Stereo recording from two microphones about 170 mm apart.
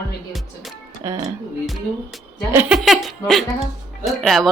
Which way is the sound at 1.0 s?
20° right (ahead or behind).